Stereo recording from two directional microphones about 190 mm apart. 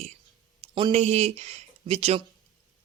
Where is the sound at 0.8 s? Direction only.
30° right (ahead or behind).